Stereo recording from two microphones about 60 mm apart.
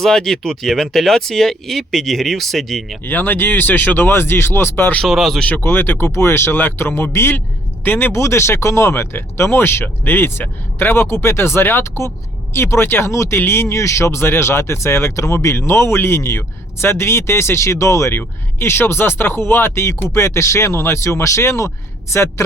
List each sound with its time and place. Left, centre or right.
0.0 s speech: centre
3.0 s speech: left
5.0 s speech: centre
5.4 s speech: left
5.6 s speech: left
6.1 s speech: left
8.1 s speech: left
18.2 s speech: left